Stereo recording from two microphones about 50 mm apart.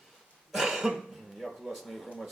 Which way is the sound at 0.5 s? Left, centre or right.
Centre.